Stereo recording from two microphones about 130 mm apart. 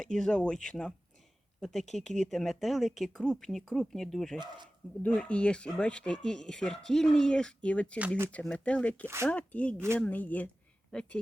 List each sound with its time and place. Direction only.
0.0 s speech: 5° left (ahead or behind)
4.4 s speech: 35° right (ahead or behind)
5.0 s speech: 10° left (ahead or behind)